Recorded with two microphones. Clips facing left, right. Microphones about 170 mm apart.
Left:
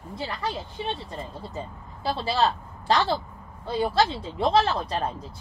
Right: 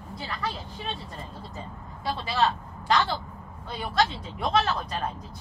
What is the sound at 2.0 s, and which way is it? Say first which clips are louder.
A woman's voice: left 2 dB; 30° left (ahead or behind).